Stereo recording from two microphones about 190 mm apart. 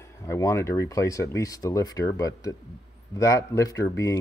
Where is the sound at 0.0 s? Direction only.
15° left (ahead or behind).